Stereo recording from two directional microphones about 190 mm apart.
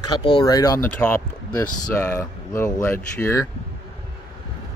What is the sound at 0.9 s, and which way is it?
Speech, 5° left (ahead or behind).